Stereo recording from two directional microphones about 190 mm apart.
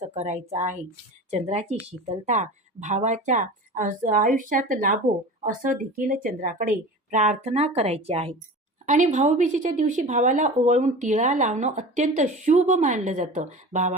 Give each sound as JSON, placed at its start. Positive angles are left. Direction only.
{"t": 0.0, "sound": "speech", "side_deg": -35}